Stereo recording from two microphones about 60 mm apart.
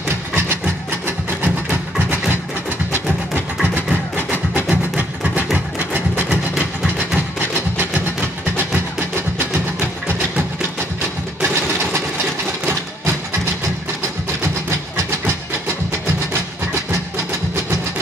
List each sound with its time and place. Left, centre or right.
1.0 s a sound: right
2.9 s music: right
4.3 s music: right
5.9 s a sound: right
6.5 s train: centre
11.4 s sewing machine: right